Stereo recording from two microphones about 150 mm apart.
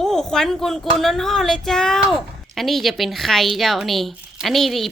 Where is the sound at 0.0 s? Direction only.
5° left (ahead or behind).